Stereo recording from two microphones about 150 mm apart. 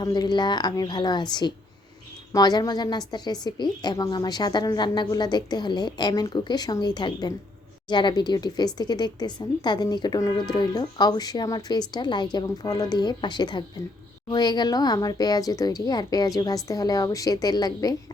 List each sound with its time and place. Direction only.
0.0 s a woman's voice: 25° left (ahead or behind)